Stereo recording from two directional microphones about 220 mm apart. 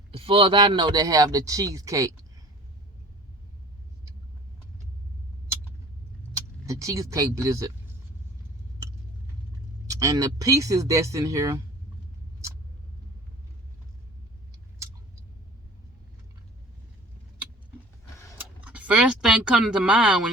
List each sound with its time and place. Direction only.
0.1 s speech: 25° right (ahead or behind)
6.3 s speech: 15° right (ahead or behind)
9.8 s speech: 15° right (ahead or behind)
18.3 s a sound: 5° right (ahead or behind)